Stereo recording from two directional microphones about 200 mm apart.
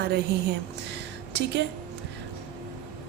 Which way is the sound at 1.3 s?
60° right (ahead or behind).